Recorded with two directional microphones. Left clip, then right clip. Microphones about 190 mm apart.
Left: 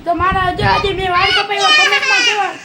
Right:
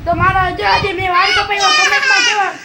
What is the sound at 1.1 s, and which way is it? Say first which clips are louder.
Speech: right 2 dB; 5° right (ahead or behind).